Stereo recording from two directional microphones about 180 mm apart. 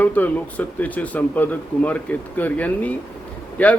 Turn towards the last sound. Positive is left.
turn(degrees=10)  # may be behind; listen again after turning